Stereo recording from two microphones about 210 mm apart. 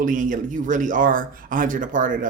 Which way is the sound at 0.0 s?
40° right (ahead or behind).